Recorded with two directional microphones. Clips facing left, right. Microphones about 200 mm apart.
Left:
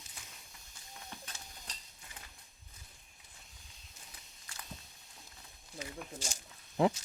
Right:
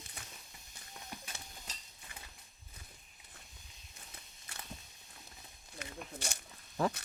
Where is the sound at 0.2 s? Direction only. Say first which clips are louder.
Right 2 dB; 60° right (ahead or behind).